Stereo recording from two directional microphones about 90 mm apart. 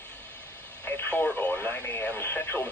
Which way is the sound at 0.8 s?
20° left (ahead or behind).